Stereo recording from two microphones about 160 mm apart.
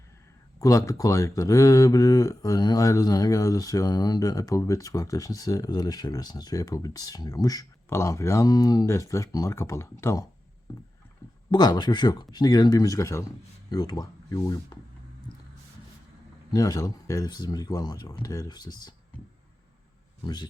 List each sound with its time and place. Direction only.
0.6 s speech: 20° left (ahead or behind)
11.5 s speech: 25° left (ahead or behind)
16.5 s speech: 20° left (ahead or behind)
20.2 s speech: 25° left (ahead or behind)